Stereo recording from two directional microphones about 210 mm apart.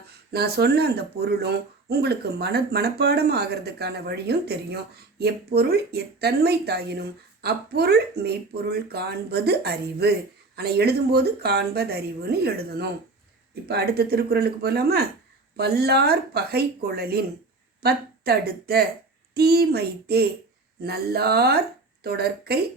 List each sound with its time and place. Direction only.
0.3 s speech: 50° right (ahead or behind)